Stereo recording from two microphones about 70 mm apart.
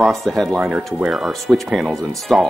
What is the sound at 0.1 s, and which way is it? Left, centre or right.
Speech, centre.